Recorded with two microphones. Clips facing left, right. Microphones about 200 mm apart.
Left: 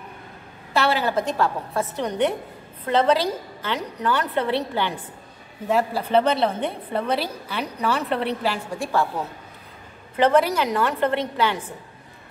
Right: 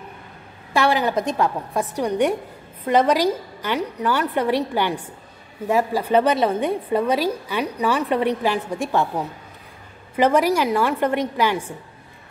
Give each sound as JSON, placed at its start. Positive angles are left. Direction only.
{"t": 0.7, "sound": "a woman's voice", "side_deg": -15}
{"t": 10.1, "sound": "a woman's voice", "side_deg": -10}